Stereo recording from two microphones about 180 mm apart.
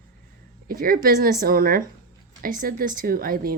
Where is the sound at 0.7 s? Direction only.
55° right (ahead or behind).